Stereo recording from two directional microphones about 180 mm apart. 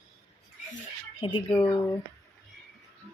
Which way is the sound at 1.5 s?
25° left (ahead or behind).